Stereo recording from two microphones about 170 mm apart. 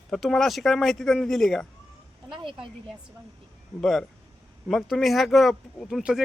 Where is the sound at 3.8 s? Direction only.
Centre (ahead or behind).